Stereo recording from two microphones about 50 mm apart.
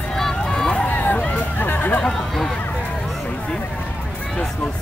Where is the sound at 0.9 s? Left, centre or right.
Left.